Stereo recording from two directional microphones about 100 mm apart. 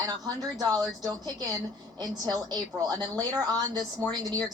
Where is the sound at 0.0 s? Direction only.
40° right (ahead or behind).